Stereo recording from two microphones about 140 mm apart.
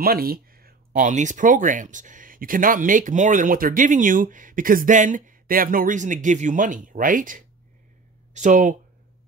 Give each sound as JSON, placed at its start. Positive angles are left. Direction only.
{"t": 0.0, "sound": "speech", "side_deg": -90}